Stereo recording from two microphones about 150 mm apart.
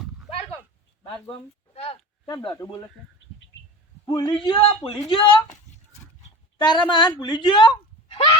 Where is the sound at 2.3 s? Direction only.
25° left (ahead or behind).